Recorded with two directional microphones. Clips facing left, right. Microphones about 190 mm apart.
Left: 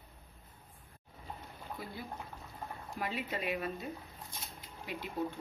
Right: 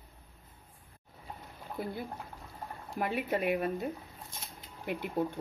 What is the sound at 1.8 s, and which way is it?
Speech, 60° right (ahead or behind).